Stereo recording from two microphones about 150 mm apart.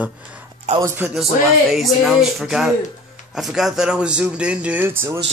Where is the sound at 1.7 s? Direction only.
Centre (ahead or behind).